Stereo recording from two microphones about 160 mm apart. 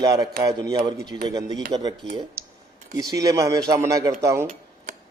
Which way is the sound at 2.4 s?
15° right (ahead or behind).